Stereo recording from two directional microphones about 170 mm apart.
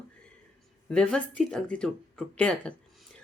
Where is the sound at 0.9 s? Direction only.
5° left (ahead or behind).